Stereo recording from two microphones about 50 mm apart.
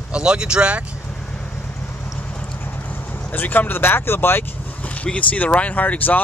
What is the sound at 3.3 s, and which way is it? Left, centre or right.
Speech, left.